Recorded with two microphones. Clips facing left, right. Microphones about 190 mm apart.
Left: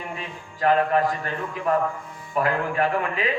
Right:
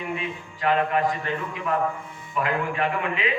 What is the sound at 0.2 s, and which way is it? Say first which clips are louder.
A man's voice: left 2 dB; 40° left (ahead or behind).